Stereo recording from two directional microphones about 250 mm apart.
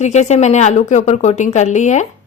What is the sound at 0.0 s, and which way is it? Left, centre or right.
Speech, left.